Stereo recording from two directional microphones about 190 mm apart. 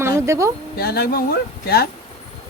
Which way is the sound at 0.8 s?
55° left (ahead or behind).